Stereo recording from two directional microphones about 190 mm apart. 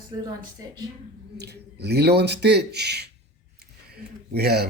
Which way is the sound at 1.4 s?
60° right (ahead or behind).